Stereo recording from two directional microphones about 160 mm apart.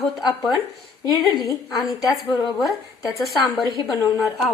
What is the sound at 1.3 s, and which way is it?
A woman's voice, 25° left (ahead or behind).